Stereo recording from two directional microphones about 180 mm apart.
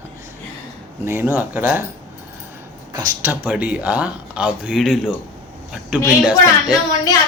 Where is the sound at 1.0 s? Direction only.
15° right (ahead or behind).